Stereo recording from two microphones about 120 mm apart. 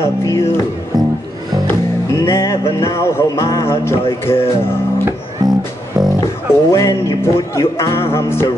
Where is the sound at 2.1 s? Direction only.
30° left (ahead or behind).